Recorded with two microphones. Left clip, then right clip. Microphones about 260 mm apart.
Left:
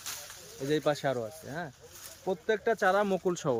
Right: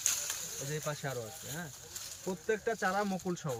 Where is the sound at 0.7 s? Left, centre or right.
Left.